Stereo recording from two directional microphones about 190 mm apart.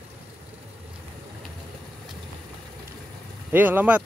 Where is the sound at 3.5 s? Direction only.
10° right (ahead or behind).